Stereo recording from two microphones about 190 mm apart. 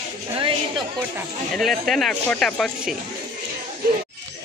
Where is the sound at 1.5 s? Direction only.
Centre (ahead or behind).